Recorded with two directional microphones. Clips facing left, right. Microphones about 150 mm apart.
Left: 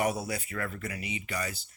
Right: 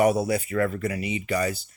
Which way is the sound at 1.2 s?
75° right (ahead or behind).